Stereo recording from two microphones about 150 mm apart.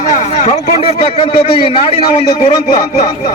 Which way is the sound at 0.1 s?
50° left (ahead or behind).